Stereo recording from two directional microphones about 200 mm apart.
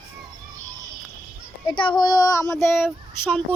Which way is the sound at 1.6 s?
25° left (ahead or behind).